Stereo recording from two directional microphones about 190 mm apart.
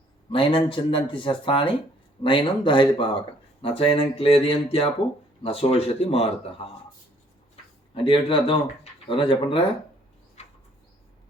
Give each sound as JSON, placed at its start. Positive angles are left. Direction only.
{"t": 0.3, "sound": "speech", "side_deg": 25}
{"t": 7.9, "sound": "speech", "side_deg": 25}
{"t": 10.4, "sound": "a sound", "side_deg": 35}